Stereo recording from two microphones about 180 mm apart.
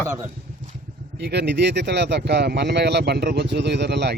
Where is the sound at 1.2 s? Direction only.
70° right (ahead or behind).